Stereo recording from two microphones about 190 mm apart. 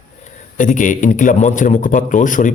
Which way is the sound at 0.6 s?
45° left (ahead or behind).